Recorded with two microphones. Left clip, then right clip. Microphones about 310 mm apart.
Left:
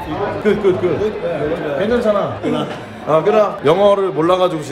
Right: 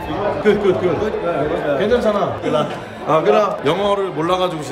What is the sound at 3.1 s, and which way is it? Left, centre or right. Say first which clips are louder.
A man's voice: left 1 dB; centre.